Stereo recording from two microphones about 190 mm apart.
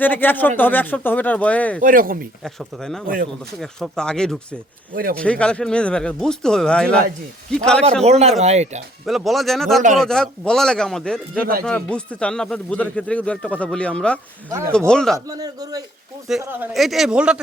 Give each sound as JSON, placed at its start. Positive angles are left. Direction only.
{"t": 0.0, "sound": "speech", "side_deg": 10}
{"t": 1.8, "sound": "speech", "side_deg": -45}
{"t": 2.4, "sound": "speech", "side_deg": 0}
{"t": 4.9, "sound": "speech", "side_deg": -50}
{"t": 5.2, "sound": "speech", "side_deg": 5}
{"t": 8.0, "sound": "speech", "side_deg": -35}
{"t": 9.0, "sound": "speech", "side_deg": 0}
{"t": 15.3, "sound": "a man's voice", "side_deg": -20}